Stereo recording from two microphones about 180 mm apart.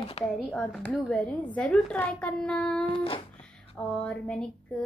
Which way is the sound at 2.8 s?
30° left (ahead or behind).